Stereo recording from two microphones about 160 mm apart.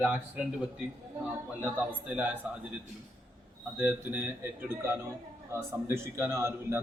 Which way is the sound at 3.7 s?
10° right (ahead or behind).